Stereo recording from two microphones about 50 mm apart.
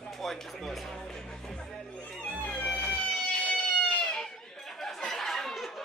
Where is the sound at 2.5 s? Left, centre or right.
Left.